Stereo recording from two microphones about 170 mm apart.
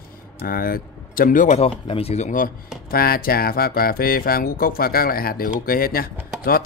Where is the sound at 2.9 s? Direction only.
60° left (ahead or behind).